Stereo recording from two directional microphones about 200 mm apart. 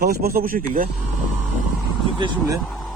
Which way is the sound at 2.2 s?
25° right (ahead or behind).